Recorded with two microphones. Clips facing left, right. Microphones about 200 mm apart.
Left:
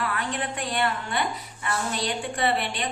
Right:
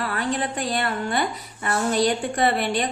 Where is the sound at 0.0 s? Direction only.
35° right (ahead or behind).